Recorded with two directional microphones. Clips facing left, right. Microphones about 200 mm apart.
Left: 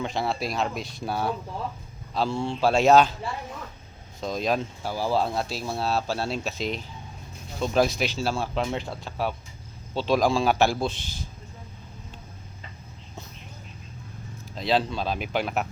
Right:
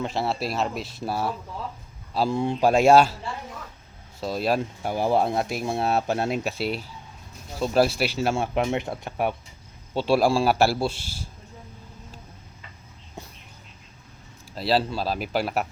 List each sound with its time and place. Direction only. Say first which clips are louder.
0.0 s speech: right 1 dB; 5° right (ahead or behind)
2.1 s a man's voice: right 3 dB; 15° right (ahead or behind)
4.2 s a man's voice: right 2 dB; 5° right (ahead or behind)
4.8 s a man's voice: right 3 dB; 20° right (ahead or behind)
8.3 s a man's voice: right 3 dB; 25° right (ahead or behind)
14.5 s speech: right 1 dB; 5° right (ahead or behind)